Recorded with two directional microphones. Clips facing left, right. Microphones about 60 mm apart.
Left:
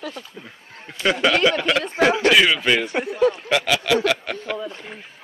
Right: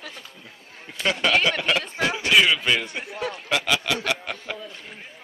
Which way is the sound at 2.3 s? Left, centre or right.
Centre.